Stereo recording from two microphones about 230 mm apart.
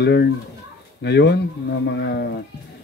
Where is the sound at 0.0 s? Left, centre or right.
Left.